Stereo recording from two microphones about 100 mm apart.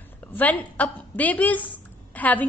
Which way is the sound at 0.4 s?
15° left (ahead or behind).